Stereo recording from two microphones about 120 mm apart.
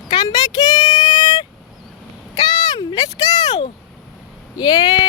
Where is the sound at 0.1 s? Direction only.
35° left (ahead or behind).